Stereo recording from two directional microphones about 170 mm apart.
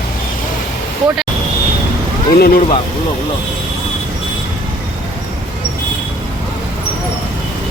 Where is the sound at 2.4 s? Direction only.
60° left (ahead or behind).